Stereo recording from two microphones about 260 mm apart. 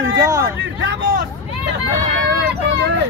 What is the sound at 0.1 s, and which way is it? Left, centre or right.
Hubbub, centre.